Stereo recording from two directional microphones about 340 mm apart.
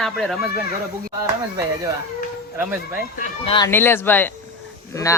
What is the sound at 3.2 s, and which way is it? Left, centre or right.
Speech, centre.